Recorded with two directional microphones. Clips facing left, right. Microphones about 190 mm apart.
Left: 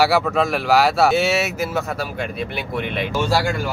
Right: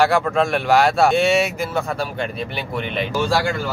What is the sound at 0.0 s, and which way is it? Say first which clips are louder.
Speech: even; 5° left (ahead or behind).